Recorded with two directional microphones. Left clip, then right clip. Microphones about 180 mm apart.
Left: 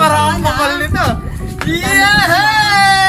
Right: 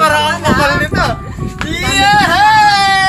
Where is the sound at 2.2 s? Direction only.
10° right (ahead or behind).